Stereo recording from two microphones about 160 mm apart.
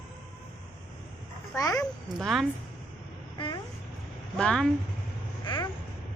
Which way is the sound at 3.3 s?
30° left (ahead or behind).